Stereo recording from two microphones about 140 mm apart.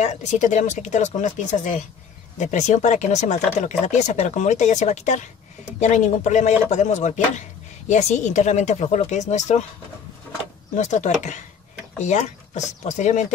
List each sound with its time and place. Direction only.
0.0 s speech: 55° left (ahead or behind)
10.8 s speech: 60° left (ahead or behind)